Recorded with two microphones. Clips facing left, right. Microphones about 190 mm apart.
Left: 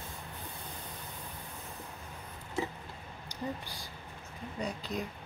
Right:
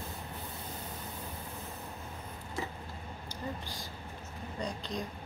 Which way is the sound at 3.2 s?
10° left (ahead or behind).